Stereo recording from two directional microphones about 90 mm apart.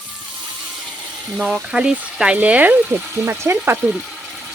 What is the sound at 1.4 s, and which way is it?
Speech, 10° right (ahead or behind).